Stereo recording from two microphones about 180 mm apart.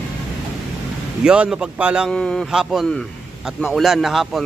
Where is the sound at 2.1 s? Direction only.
5° left (ahead or behind).